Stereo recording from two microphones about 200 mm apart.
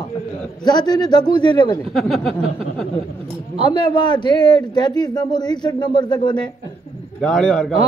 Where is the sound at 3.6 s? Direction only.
25° left (ahead or behind).